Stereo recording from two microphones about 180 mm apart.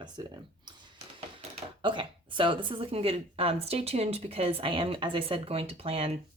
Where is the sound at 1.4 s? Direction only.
25° right (ahead or behind).